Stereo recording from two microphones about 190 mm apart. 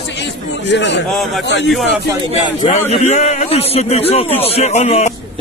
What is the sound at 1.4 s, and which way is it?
Speech, 70° left (ahead or behind).